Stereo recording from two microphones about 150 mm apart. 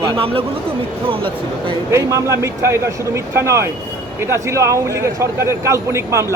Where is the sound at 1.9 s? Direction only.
20° right (ahead or behind).